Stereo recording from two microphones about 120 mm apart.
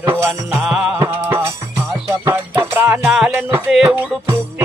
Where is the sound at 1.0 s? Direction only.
25° right (ahead or behind).